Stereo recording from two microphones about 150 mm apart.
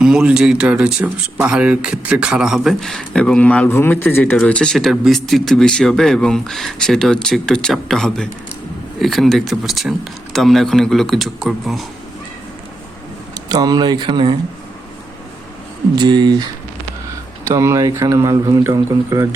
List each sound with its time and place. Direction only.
0.0 s speech: 5° right (ahead or behind)
13.5 s speech: 25° right (ahead or behind)
16.0 s speech: 30° right (ahead or behind)
17.5 s speech: 20° right (ahead or behind)